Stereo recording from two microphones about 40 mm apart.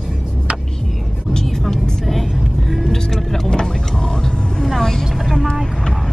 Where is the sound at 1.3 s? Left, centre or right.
Centre.